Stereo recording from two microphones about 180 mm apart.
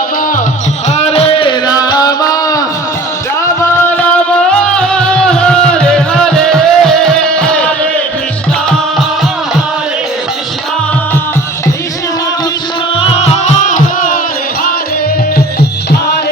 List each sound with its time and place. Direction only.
0.9 s chant: 35° left (ahead or behind)
4.8 s music: 5° left (ahead or behind)
13.0 s music: 35° left (ahead or behind)